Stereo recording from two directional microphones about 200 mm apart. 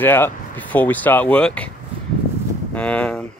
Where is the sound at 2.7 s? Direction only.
5° left (ahead or behind).